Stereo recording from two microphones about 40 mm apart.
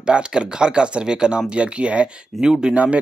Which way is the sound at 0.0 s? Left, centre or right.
Right.